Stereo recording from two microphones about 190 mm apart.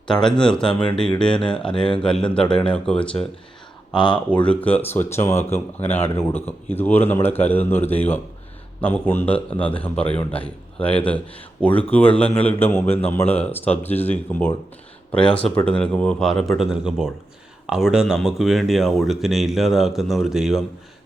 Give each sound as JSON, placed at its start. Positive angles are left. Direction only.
{"t": 0.1, "sound": "speech", "side_deg": 5}
{"t": 3.9, "sound": "speech", "side_deg": 25}
{"t": 4.4, "sound": "a man's voice", "side_deg": 10}